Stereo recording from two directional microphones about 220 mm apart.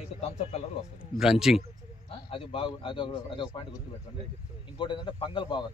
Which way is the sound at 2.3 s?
25° left (ahead or behind).